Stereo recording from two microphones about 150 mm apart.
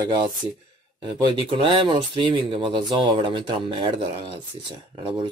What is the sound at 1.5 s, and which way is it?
Speech, 35° right (ahead or behind).